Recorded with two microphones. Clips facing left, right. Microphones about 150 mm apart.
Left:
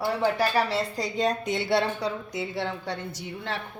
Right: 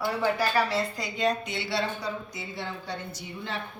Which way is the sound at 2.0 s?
90° left.